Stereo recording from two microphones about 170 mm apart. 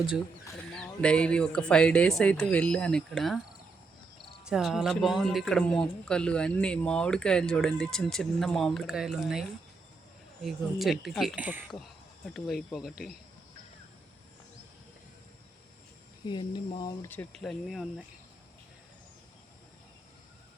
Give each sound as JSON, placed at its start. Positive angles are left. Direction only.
{"t": 0.7, "sound": "speech", "side_deg": 5}
{"t": 4.4, "sound": "speech", "side_deg": -5}
{"t": 16.2, "sound": "speech", "side_deg": 25}
{"t": 17.1, "sound": "speech", "side_deg": 5}